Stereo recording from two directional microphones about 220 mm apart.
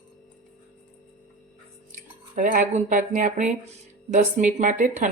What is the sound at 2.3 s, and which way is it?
Speech, 35° right (ahead or behind).